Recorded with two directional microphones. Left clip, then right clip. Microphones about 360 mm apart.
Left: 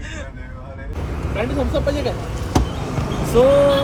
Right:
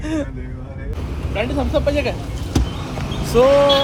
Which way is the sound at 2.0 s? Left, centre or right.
Centre.